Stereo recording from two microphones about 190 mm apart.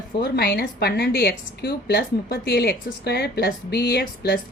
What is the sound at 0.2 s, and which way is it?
A woman's voice, 55° left (ahead or behind).